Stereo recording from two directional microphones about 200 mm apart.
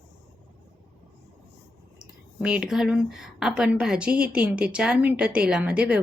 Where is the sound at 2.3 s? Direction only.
5° right (ahead or behind).